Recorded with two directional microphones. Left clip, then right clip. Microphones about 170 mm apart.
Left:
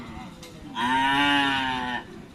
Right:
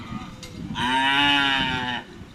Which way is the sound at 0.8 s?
5° right (ahead or behind).